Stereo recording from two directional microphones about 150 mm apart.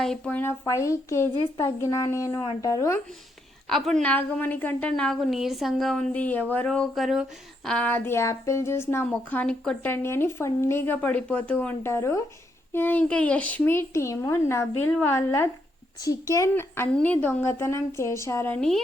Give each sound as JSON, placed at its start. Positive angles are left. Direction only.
{"t": 0.0, "sound": "speech", "side_deg": 5}
{"t": 3.7, "sound": "a woman's voice", "side_deg": 0}